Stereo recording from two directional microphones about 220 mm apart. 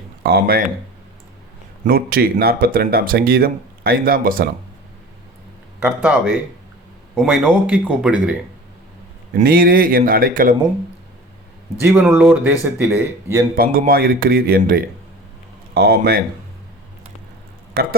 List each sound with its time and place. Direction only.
0.2 s speech: 45° right (ahead or behind)
1.8 s speech: 40° right (ahead or behind)
5.8 s speech: 5° right (ahead or behind)
9.3 s speech: 40° right (ahead or behind)
11.8 s speech: 5° right (ahead or behind)
13.6 s speech: 40° right (ahead or behind)
17.7 s speech: 45° right (ahead or behind)